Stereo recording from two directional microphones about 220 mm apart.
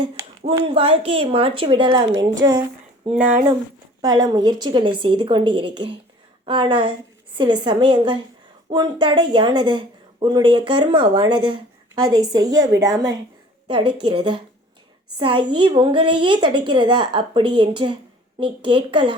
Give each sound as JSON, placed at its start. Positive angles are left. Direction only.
{"t": 0.0, "sound": "a woman's voice", "side_deg": -20}
{"t": 4.0, "sound": "a woman's voice", "side_deg": -20}